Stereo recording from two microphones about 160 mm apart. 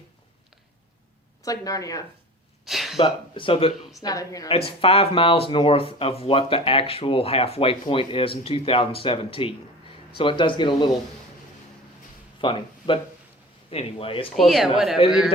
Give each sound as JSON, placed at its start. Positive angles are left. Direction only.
{"t": 1.4, "sound": "speech", "side_deg": 20}
{"t": 2.6, "sound": "a sound", "side_deg": 0}
{"t": 3.0, "sound": "speech", "side_deg": 35}
{"t": 4.0, "sound": "speech", "side_deg": 20}
{"t": 4.4, "sound": "speech", "side_deg": 35}
{"t": 12.4, "sound": "speech", "side_deg": 35}
{"t": 14.3, "sound": "speech", "side_deg": 0}